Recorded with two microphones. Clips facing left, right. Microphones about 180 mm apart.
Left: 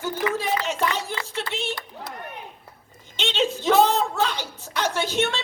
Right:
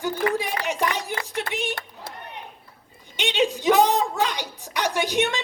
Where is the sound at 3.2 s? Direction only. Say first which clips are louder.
Right 2 dB; 15° right (ahead or behind).